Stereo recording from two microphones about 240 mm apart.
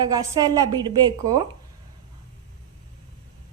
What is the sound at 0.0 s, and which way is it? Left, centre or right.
A woman's voice, centre.